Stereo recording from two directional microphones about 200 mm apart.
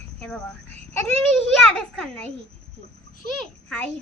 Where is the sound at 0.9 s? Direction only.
5° left (ahead or behind).